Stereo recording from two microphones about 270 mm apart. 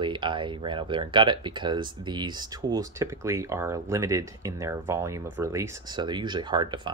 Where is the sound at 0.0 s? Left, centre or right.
Centre.